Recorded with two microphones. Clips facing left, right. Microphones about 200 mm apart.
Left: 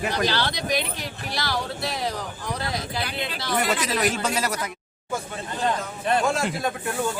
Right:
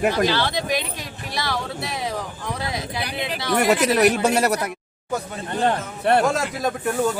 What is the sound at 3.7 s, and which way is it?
Speech, 60° right (ahead or behind).